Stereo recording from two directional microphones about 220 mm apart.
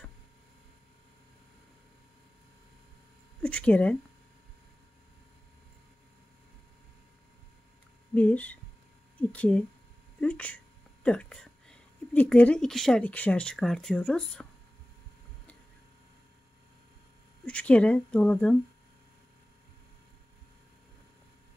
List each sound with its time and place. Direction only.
3.4 s speech: 5° left (ahead or behind)
8.1 s a sound: 5° left (ahead or behind)
9.3 s speech: 5° left (ahead or behind)
10.2 s a sound: 5° left (ahead or behind)
11.1 s speech: 5° left (ahead or behind)
17.5 s speech: 5° left (ahead or behind)